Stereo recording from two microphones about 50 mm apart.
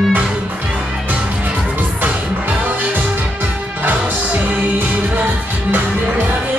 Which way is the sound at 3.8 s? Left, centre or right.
Right.